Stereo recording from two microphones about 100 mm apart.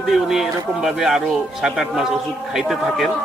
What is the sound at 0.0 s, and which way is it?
Speech, centre (ahead or behind).